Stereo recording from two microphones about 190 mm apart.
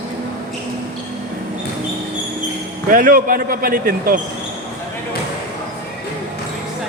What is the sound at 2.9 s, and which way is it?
Speech, 45° right (ahead or behind).